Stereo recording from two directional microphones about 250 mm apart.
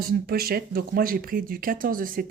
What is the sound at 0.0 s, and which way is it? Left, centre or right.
Speech, right.